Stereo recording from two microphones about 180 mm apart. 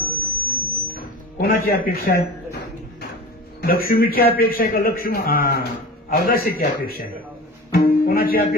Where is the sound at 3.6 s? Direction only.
55° left (ahead or behind).